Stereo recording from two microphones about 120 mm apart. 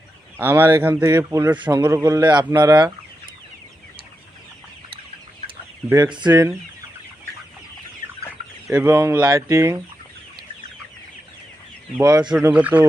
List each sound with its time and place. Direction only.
0.3 s speech: 20° right (ahead or behind)
1.5 s a man's voice: 35° right (ahead or behind)
6.3 s speech: 20° right (ahead or behind)
8.7 s speech: 15° right (ahead or behind)
9.2 s speech: 25° right (ahead or behind)
12.0 s a man's voice: 30° right (ahead or behind)
12.5 s speech: 10° right (ahead or behind)